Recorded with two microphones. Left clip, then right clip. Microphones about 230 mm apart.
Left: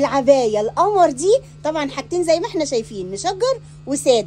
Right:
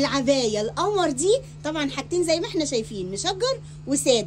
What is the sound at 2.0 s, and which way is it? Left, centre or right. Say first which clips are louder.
A woman's voice: left 6 dB; left.